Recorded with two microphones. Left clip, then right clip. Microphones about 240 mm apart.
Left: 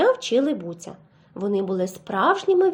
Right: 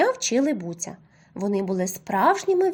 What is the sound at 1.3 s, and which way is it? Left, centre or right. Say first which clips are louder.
Speech: left 2 dB; right.